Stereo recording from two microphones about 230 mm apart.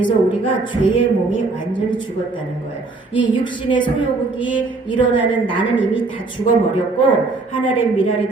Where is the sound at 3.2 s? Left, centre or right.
Left.